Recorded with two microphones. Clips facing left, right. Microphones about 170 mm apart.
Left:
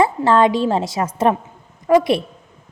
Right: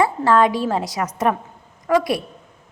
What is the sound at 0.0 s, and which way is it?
A woman's voice, 25° left (ahead or behind).